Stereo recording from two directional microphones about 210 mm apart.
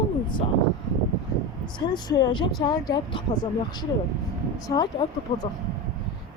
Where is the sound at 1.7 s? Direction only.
20° left (ahead or behind).